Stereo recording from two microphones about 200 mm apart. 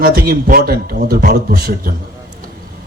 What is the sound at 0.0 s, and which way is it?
A man's voice, 50° right (ahead or behind).